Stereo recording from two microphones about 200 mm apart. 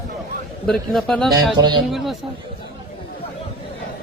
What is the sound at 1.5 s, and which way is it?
Speech, 20° right (ahead or behind).